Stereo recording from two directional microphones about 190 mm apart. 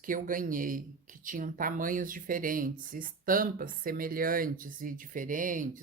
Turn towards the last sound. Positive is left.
turn(degrees=-45)  # may be behind; listen again after turning